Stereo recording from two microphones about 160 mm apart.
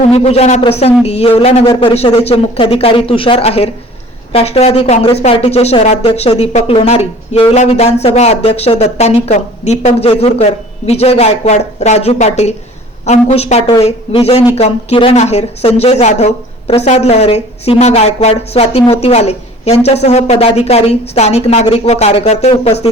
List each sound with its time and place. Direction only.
0.1 s a woman's voice: 40° left (ahead or behind)